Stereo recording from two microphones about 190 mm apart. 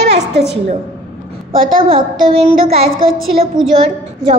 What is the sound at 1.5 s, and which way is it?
Speech, 50° right (ahead or behind).